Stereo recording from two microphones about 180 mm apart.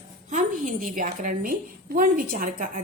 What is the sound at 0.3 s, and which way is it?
A woman's voice, 45° right (ahead or behind).